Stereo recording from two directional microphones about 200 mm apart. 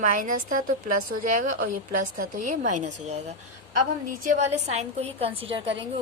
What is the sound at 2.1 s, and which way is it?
A woman's voice, 40° right (ahead or behind).